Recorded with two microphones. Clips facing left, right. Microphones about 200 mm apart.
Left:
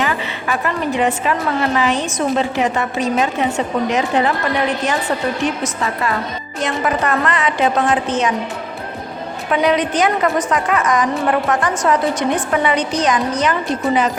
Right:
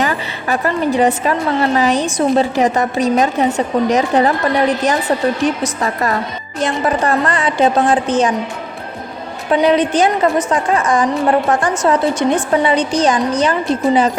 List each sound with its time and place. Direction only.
0.0 s a woman's voice: 40° right (ahead or behind)
5.8 s a woman's voice: 40° right (ahead or behind)
9.5 s a woman's voice: 30° right (ahead or behind)